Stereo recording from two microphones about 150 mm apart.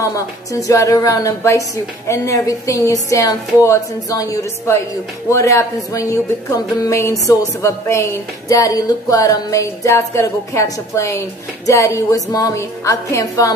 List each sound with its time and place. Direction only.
0.0 s speech: 20° left (ahead or behind)